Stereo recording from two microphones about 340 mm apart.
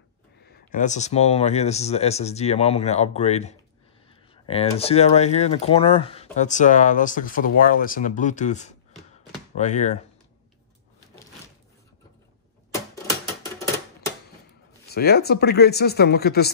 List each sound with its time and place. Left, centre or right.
0.4 s speech: left
12.7 s typewriter: centre
14.9 s speech: left